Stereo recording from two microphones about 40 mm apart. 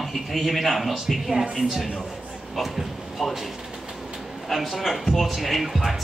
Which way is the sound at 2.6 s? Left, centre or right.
Centre.